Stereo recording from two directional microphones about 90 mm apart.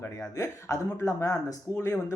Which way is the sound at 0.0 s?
30° left (ahead or behind).